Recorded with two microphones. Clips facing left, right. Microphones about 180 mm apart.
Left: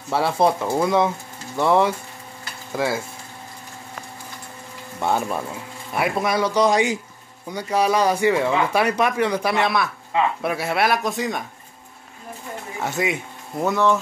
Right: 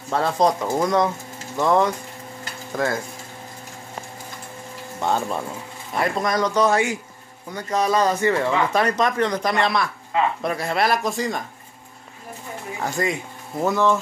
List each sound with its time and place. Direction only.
0.1 s speech: 10° left (ahead or behind)
5.0 s speech: 10° left (ahead or behind)
12.7 s speech: centre (ahead or behind)